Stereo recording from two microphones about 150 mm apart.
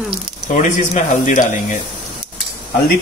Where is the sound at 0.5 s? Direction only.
55° left (ahead or behind).